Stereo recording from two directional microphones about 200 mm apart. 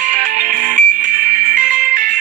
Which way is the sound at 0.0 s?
40° right (ahead or behind).